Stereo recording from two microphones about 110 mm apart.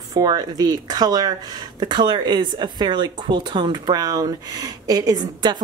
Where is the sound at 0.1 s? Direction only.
35° right (ahead or behind).